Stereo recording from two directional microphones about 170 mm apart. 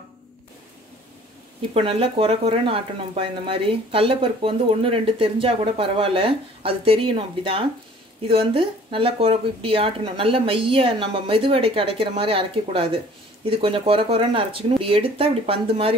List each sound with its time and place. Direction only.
1.7 s speech: 35° right (ahead or behind)